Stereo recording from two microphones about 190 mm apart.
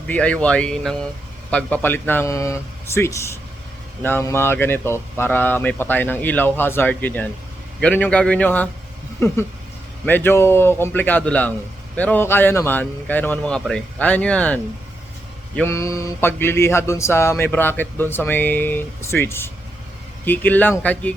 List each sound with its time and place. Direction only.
0.1 s speech: 5° left (ahead or behind)
10.1 s speech: 10° left (ahead or behind)